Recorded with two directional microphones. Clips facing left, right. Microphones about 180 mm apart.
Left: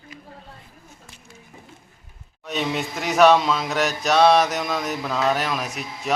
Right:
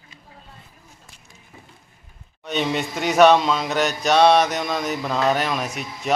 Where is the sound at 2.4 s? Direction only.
Centre (ahead or behind).